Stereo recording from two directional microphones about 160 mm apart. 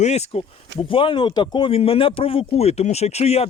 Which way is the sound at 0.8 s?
35° left (ahead or behind).